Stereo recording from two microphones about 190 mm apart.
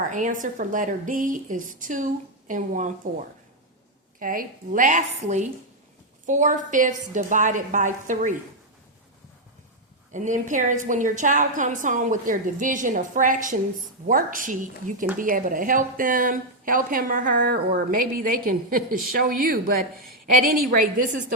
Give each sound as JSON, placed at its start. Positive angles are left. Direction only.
{"t": 0.0, "sound": "speech", "side_deg": -40}
{"t": 10.1, "sound": "speech", "side_deg": -40}